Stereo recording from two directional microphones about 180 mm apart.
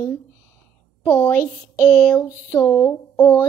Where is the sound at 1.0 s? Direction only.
10° left (ahead or behind).